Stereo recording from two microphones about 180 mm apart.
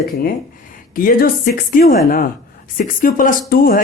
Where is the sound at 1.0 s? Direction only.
55° left (ahead or behind).